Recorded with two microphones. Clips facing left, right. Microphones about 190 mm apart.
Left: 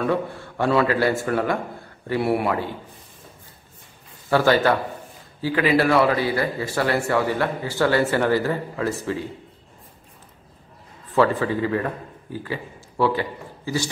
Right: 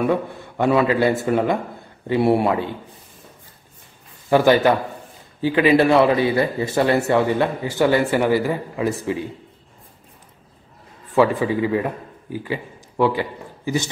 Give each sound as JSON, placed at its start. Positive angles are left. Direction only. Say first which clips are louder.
{"t": 0.0, "sound": "a man's voice", "louder": "right 2 dB", "side_deg": -15}
{"t": 4.3, "sound": "a man's voice", "louder": "right 3 dB", "side_deg": -15}
{"t": 11.1, "sound": "a man's voice", "louder": "right 2 dB", "side_deg": -15}